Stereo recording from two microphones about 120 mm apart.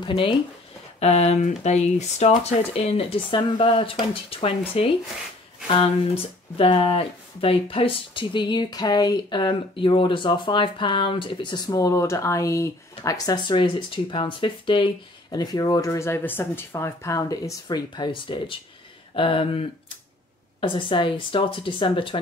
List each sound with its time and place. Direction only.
0.0 s speech: 45° left (ahead or behind)
0.9 s speech: 65° left (ahead or behind); by 14.9 s 45° left (ahead or behind)
15.3 s speech: 30° left (ahead or behind); by 19.6 s 50° left (ahead or behind)
20.6 s speech: 45° left (ahead or behind)